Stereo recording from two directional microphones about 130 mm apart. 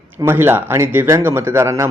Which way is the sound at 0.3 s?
15° right (ahead or behind).